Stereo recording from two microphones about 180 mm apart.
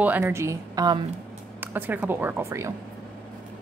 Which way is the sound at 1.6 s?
10° right (ahead or behind).